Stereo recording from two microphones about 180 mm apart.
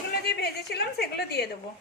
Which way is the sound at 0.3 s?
65° left (ahead or behind).